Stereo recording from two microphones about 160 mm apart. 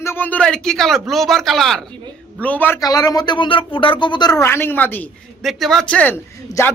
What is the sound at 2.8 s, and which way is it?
A man's voice, 25° left (ahead or behind).